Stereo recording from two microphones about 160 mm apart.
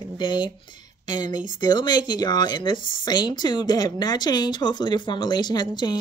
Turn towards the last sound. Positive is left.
turn(degrees=25)  # may be behind; listen again after turning